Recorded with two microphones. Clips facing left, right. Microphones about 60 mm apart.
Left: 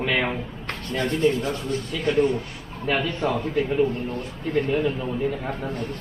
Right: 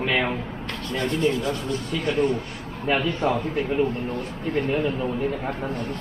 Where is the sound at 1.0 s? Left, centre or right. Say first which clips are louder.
Left 1 dB; left.